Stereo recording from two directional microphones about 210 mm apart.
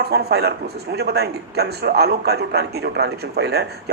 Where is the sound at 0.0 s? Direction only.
50° right (ahead or behind).